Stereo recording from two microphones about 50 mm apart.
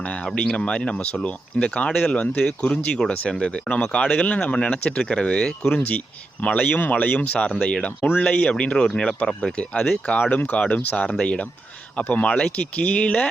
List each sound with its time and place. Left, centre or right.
0.0 s a sound: left
0.3 s speech: centre
5.7 s speech: left; by 7.9 s centre
7.9 s speech: left
10.2 s speech: left
11.1 s speech: left